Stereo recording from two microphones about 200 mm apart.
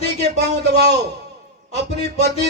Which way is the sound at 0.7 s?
55° right (ahead or behind).